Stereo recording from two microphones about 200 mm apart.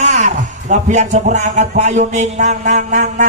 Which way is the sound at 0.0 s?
35° right (ahead or behind).